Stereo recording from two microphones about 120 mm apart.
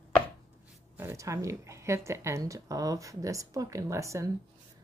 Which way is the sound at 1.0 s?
25° right (ahead or behind).